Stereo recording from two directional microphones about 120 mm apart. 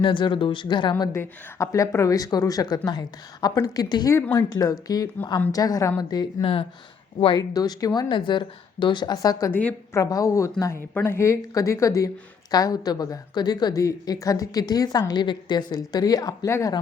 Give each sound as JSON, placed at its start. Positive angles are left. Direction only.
{"t": 0.0, "sound": "a woman's voice", "side_deg": 40}
{"t": 1.1, "sound": "a woman's voice", "side_deg": 25}
{"t": 6.4, "sound": "speech", "side_deg": 55}
{"t": 7.3, "sound": "a woman's voice", "side_deg": 35}
{"t": 9.5, "sound": "a woman's voice", "side_deg": 15}
{"t": 10.0, "sound": "a woman's voice", "side_deg": 30}